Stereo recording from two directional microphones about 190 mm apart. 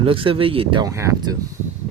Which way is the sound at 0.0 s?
30° right (ahead or behind).